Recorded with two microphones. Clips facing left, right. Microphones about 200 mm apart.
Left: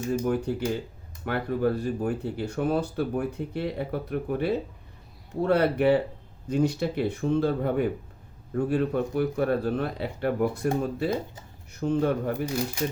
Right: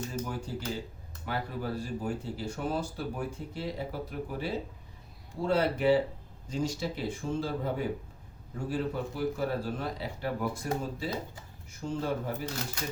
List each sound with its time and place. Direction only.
0.1 s speech: 60° left (ahead or behind)